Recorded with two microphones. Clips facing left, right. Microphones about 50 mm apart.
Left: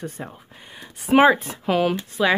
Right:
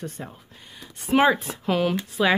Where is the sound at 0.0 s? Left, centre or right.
Centre.